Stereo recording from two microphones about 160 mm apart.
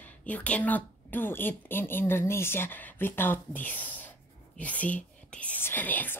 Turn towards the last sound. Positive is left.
turn(degrees=10)  # may be behind; listen again after turning